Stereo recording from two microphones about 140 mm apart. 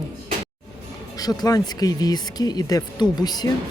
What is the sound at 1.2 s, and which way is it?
Speech, 25° left (ahead or behind).